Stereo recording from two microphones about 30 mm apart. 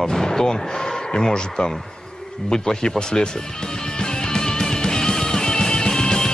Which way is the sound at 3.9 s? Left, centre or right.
Left.